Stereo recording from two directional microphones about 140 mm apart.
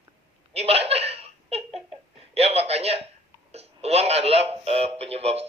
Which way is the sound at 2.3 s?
45° right (ahead or behind).